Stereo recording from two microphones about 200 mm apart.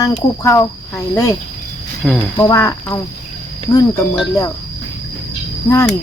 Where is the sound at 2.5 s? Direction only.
15° left (ahead or behind).